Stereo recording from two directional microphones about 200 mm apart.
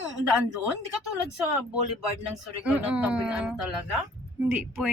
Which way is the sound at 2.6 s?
5° right (ahead or behind).